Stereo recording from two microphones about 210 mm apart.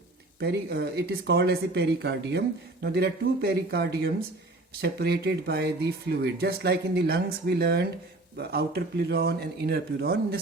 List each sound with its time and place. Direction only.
0.3 s speech: 50° right (ahead or behind)